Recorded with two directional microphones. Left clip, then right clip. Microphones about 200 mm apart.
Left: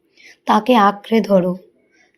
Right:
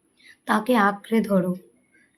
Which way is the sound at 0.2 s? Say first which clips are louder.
Left 8 dB; 25° left (ahead or behind).